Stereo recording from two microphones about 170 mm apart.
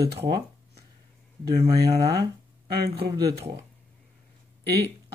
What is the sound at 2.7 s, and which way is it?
Speech, 70° right (ahead or behind).